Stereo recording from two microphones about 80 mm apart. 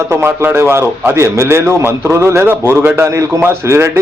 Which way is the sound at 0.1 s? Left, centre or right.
Right.